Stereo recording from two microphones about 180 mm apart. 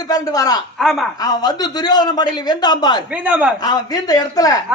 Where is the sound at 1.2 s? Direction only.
20° left (ahead or behind).